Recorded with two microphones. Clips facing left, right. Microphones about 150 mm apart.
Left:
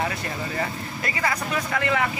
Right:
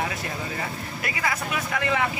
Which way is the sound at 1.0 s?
10° right (ahead or behind).